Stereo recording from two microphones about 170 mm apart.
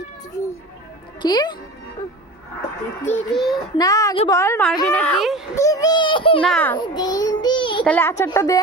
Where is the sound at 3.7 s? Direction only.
20° left (ahead or behind).